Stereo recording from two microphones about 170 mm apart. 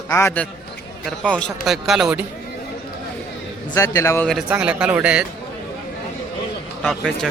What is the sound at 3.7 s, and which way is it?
Speech, 20° left (ahead or behind).